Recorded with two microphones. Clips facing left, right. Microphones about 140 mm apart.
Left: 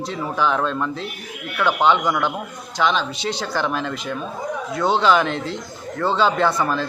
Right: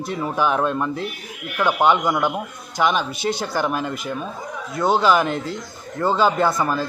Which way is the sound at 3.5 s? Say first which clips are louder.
Right 1 dB; 10° right (ahead or behind).